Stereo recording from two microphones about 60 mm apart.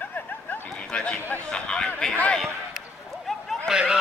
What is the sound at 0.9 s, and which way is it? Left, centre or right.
Speech, centre.